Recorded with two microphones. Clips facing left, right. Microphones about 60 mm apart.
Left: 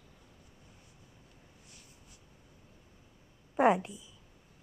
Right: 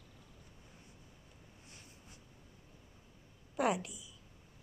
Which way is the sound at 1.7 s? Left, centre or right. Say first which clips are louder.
Right 1 dB; right.